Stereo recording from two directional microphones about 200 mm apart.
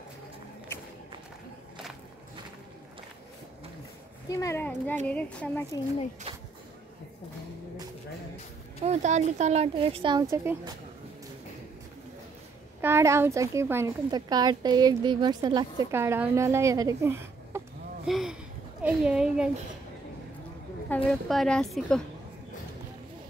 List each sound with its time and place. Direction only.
4.3 s a child's voice: 15° left (ahead or behind)
6.3 s a sound: 30° right (ahead or behind)
8.8 s speech: 35° right (ahead or behind)
10.3 s a woman's voice: 10° right (ahead or behind)
12.8 s a woman's voice: 15° right (ahead or behind)
18.0 s a child's voice: centre (ahead or behind)
20.9 s a woman's voice: centre (ahead or behind)